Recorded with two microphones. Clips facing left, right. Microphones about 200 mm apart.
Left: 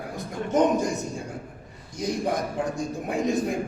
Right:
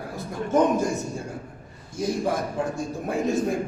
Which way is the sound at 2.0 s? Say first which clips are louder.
Right 1 dB; 15° left (ahead or behind).